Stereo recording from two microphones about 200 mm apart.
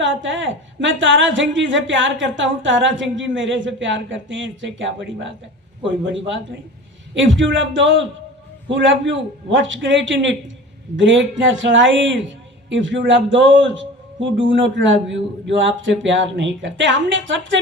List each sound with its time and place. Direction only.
0.0 s a woman's voice: 70° right (ahead or behind)